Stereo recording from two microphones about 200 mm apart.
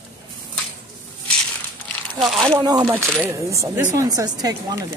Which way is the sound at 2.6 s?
20° right (ahead or behind).